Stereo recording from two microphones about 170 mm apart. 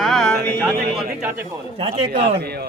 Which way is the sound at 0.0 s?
Centre (ahead or behind).